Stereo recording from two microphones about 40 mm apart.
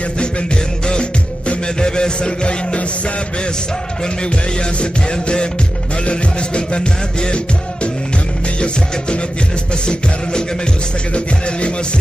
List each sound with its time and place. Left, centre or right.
0.2 s music: left
4.0 s music: left